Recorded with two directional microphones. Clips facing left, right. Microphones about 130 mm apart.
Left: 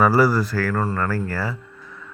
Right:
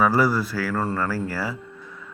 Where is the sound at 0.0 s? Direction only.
5° left (ahead or behind).